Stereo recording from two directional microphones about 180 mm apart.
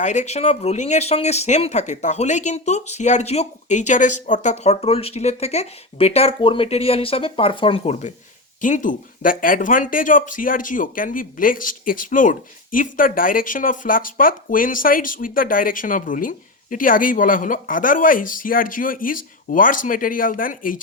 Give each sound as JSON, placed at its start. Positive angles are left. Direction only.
{"t": 0.0, "sound": "speech", "side_deg": 40}
{"t": 8.6, "sound": "speech", "side_deg": 45}